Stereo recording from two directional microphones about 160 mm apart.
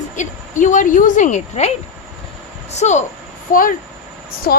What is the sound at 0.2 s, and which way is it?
A woman's voice, 50° left (ahead or behind).